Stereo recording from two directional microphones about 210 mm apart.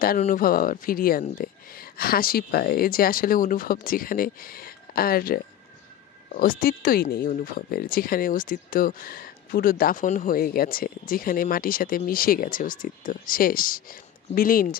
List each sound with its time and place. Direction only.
0.2 s speech: 40° left (ahead or behind)